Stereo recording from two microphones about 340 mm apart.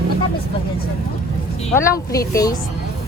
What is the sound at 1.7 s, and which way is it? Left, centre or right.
Speech, centre.